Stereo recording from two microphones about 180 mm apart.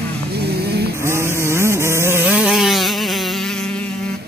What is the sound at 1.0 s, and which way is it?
Vehicle, 15° right (ahead or behind).